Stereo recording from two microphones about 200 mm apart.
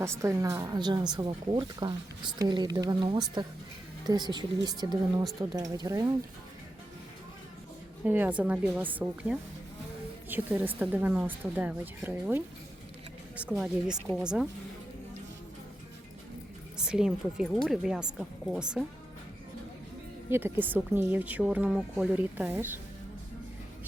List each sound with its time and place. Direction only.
0.0 s speech: 15° right (ahead or behind)
8.0 s a woman's voice: 10° right (ahead or behind)
16.7 s a woman's voice: 5° right (ahead or behind)
20.3 s a woman's voice: 10° right (ahead or behind)